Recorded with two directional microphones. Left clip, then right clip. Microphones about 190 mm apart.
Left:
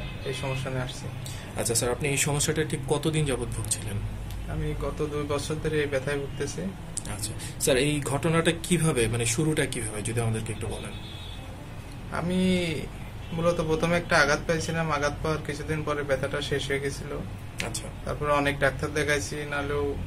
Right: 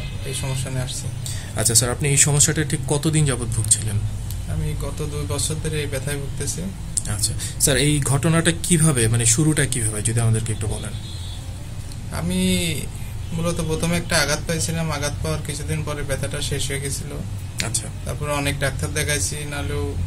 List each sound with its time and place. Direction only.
0.4 s a man's voice: 5° right (ahead or behind)
1.6 s speech: 55° right (ahead or behind)
4.8 s a man's voice: 5° right (ahead or behind)
7.2 s speech: 55° right (ahead or behind)
12.1 s a man's voice: 5° right (ahead or behind)
17.6 s speech: 60° right (ahead or behind)
18.0 s a man's voice: 5° right (ahead or behind)